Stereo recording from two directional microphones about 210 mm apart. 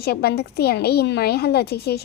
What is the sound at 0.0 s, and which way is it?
A woman's voice, 50° left (ahead or behind).